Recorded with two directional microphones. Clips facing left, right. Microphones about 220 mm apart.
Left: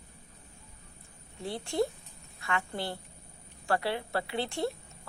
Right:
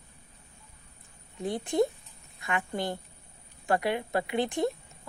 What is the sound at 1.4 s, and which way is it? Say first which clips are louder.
A woman's voice: right 4 dB; 20° right (ahead or behind).